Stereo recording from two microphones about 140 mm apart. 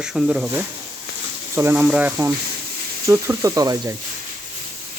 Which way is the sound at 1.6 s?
15° right (ahead or behind).